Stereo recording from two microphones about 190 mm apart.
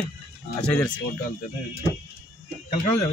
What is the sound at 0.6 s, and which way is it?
Speech, 5° left (ahead or behind).